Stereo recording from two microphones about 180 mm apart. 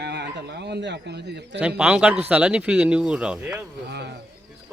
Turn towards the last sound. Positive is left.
turn(degrees=-65)  # may be behind; listen again after turning